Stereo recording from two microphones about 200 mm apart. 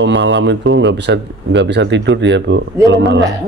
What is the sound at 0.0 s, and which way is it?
Speech, 65° right (ahead or behind).